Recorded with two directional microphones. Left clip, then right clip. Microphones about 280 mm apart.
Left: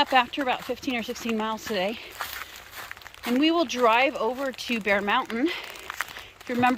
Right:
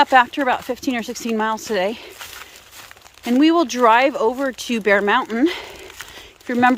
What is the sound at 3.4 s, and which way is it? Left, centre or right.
Speech, centre.